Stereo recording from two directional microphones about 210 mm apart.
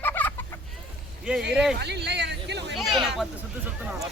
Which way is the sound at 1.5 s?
5° right (ahead or behind).